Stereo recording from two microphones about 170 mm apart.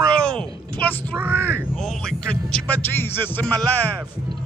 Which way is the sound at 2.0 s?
5° left (ahead or behind).